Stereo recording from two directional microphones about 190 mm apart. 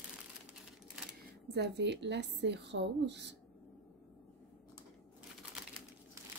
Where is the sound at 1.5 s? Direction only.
60° right (ahead or behind).